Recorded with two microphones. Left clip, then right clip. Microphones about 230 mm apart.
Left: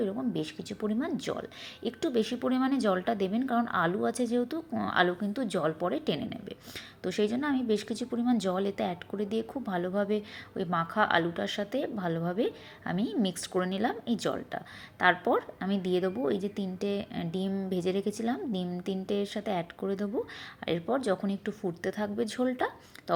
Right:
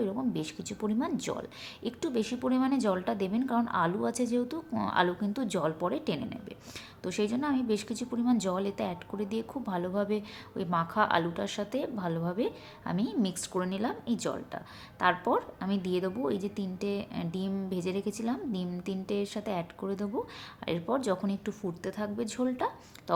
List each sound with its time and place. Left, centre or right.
0.0 s speech: centre